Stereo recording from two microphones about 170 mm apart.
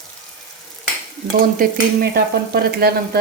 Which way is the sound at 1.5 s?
65° right (ahead or behind).